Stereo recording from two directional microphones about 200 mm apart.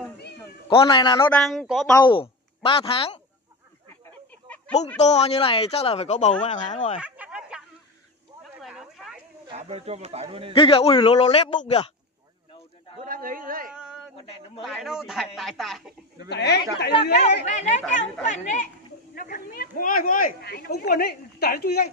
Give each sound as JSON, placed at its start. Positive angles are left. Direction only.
{"t": 0.7, "sound": "a man's voice", "side_deg": 25}
{"t": 1.3, "sound": "a man's voice", "side_deg": 5}
{"t": 2.0, "sound": "a woman's voice", "side_deg": 25}
{"t": 4.7, "sound": "speech", "side_deg": 35}
{"t": 7.0, "sound": "a sound", "side_deg": -5}
{"t": 8.6, "sound": "a sound", "side_deg": 0}
{"t": 9.5, "sound": "speech", "side_deg": -30}
{"t": 10.5, "sound": "a man's voice", "side_deg": 30}
{"t": 13.0, "sound": "a man's voice", "side_deg": -45}
{"t": 13.7, "sound": "a sound", "side_deg": 0}
{"t": 14.1, "sound": "a man's voice", "side_deg": 30}
{"t": 14.6, "sound": "a man's voice", "side_deg": 0}
{"t": 16.3, "sound": "speech", "side_deg": 55}
{"t": 17.5, "sound": "speech", "side_deg": 35}